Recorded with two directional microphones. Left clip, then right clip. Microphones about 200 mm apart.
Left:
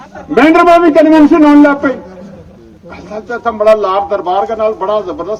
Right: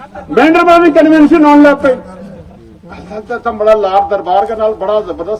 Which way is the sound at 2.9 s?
35° left (ahead or behind).